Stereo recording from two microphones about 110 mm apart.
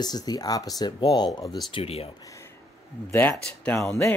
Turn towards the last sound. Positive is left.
turn(degrees=25)  # may be behind; listen again after turning